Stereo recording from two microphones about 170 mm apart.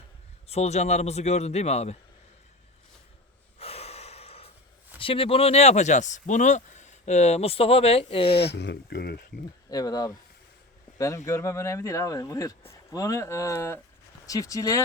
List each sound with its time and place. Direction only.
0.4 s speech: 40° left (ahead or behind)
3.6 s gasp: 35° left (ahead or behind)
4.9 s speech: 30° left (ahead or behind)
8.4 s speech: 80° left
9.6 s speech: 20° left (ahead or behind)